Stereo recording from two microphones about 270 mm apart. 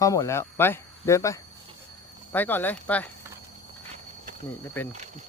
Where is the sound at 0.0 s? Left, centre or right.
Centre.